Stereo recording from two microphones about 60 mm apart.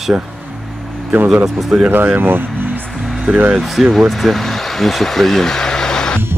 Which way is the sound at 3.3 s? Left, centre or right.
Centre.